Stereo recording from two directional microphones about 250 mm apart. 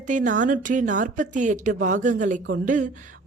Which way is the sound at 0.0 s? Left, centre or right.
Right.